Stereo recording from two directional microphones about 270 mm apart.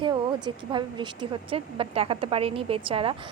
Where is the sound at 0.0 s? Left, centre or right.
Centre.